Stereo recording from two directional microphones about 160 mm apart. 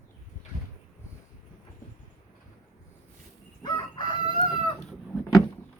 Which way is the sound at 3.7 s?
25° left (ahead or behind).